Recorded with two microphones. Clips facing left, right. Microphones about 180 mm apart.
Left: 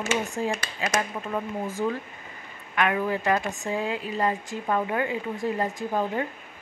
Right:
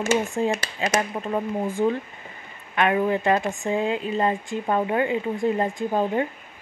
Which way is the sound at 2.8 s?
25° right (ahead or behind).